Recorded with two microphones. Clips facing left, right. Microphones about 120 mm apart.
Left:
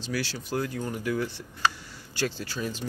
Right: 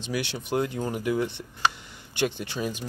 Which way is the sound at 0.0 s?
20° right (ahead or behind).